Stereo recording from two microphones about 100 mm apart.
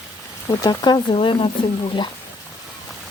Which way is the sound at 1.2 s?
60° left (ahead or behind).